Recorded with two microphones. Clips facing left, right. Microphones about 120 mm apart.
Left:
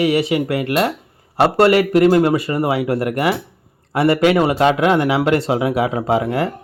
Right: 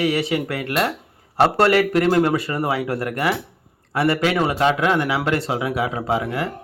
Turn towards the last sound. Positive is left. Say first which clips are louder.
# left 5 dB
turn(degrees=25)  # may be behind; listen again after turning